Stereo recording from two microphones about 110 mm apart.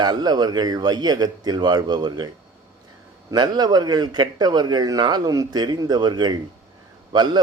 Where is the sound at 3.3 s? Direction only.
40° right (ahead or behind).